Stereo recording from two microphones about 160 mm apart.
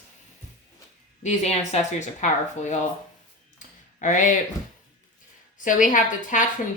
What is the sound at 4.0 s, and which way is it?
Speech, 55° left (ahead or behind).